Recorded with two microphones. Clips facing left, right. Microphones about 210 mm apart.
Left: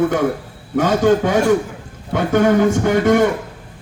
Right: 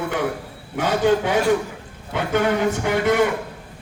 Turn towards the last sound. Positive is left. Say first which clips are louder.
# left 5 dB
turn(degrees=45)  # may be behind; listen again after turning